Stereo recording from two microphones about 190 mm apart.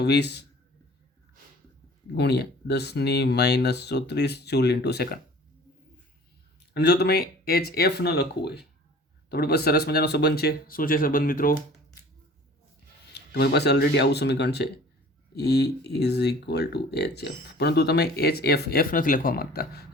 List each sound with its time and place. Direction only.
0.0 s speech: 60° left (ahead or behind)
2.1 s speech: 60° left (ahead or behind)
6.6 s speech: 60° left (ahead or behind)
13.1 s speech: 60° left (ahead or behind)